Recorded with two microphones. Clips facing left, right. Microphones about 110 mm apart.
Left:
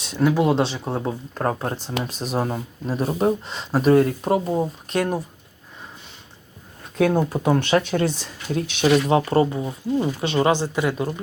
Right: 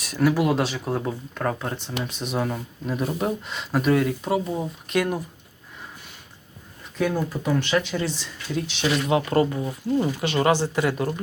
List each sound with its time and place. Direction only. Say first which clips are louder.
0.0 s speech: left 2 dB; 25° left (ahead or behind)
7.0 s speech: left 5 dB; 55° left (ahead or behind); by 11.1 s 20° left (ahead or behind)